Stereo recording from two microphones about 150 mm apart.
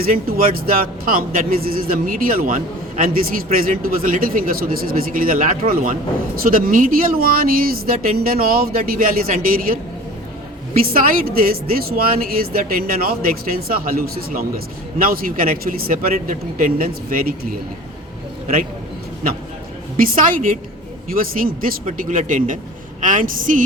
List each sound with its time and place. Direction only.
0.0 s speech: 75° right (ahead or behind)
10.9 s speech: 75° right (ahead or behind)
20.0 s speech: 65° right (ahead or behind)